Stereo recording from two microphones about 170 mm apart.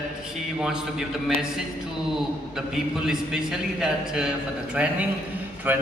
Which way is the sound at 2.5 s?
Centre (ahead or behind).